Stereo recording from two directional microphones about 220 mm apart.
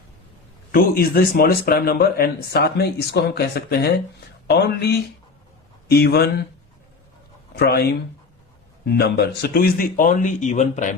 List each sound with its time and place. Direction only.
0.7 s speech: 40° left (ahead or behind)
7.5 s speech: 45° left (ahead or behind)